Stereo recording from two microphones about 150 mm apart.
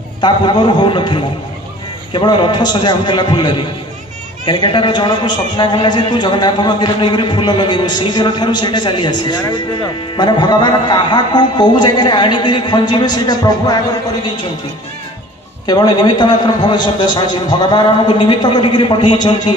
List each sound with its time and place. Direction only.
0.2 s a man's voice: 30° left (ahead or behind)
15.6 s a man's voice: 25° left (ahead or behind)